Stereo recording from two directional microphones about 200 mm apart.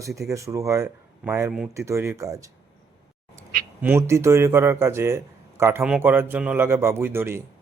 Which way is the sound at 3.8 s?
10° right (ahead or behind).